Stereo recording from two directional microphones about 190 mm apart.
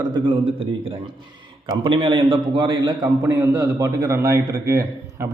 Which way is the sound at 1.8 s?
25° right (ahead or behind).